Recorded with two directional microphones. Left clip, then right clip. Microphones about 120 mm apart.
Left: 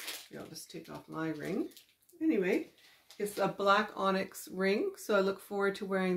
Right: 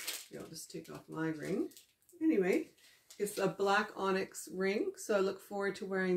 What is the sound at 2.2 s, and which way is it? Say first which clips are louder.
Speech: left 1 dB; 20° left (ahead or behind).